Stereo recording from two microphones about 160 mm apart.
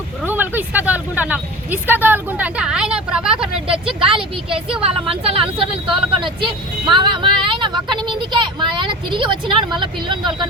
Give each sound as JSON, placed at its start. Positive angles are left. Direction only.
{"t": 0.3, "sound": "speech", "side_deg": -10}
{"t": 4.0, "sound": "speech", "side_deg": -35}